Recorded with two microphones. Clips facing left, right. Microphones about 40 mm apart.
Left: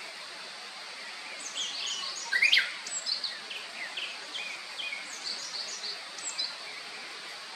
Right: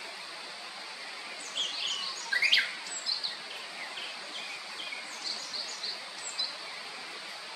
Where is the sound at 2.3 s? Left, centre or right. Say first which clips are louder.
Left 3 dB; centre.